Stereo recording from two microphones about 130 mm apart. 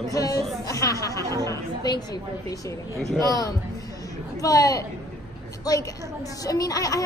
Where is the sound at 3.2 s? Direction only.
25° left (ahead or behind).